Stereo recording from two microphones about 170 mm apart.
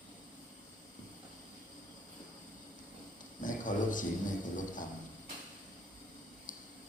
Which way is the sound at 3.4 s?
50° left (ahead or behind).